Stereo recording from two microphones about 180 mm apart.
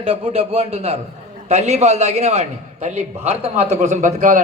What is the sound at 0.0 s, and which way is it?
A man's voice, 30° right (ahead or behind).